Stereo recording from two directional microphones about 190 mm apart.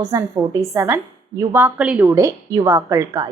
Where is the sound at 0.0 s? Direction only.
20° right (ahead or behind).